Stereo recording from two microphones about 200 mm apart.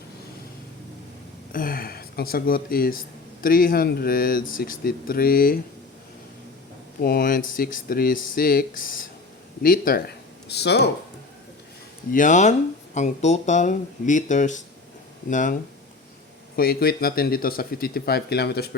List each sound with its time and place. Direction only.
1.5 s speech: 45° left (ahead or behind)
7.0 s speech: 50° left (ahead or behind)
10.5 s speech: 55° left (ahead or behind)
12.1 s speech: 40° left (ahead or behind)
16.6 s speech: 50° left (ahead or behind)